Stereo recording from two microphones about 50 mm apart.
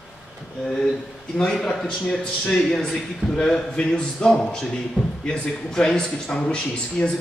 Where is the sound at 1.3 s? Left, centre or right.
Centre.